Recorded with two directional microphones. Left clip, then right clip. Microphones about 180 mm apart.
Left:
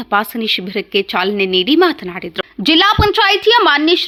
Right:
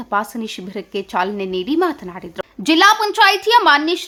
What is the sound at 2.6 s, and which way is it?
A woman's voice, 30° left (ahead or behind).